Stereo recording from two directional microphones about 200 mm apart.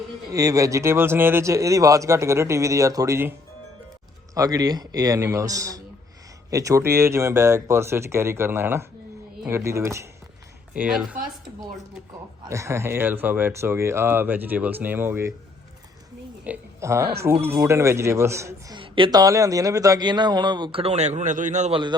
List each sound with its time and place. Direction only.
0.3 s speech: 15° right (ahead or behind)
4.4 s speech: 20° right (ahead or behind)
10.8 s speech: 5° right (ahead or behind)
12.4 s speech: 15° right (ahead or behind)
16.4 s speech: 10° right (ahead or behind)
18.8 s a man's voice: 25° right (ahead or behind)